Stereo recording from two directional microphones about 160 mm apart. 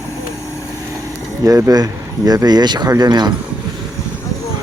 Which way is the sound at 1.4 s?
25° right (ahead or behind).